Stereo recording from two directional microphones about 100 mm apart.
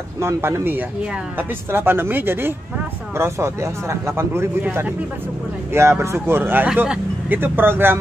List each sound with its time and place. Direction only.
0.2 s speech: 25° right (ahead or behind)